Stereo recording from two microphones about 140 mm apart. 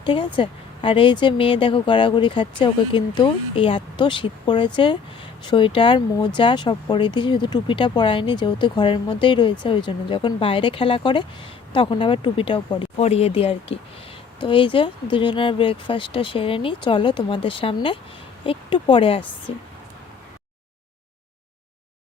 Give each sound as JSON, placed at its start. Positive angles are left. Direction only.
{"t": 0.0, "sound": "speech", "side_deg": 35}
{"t": 13.0, "sound": "speech", "side_deg": 45}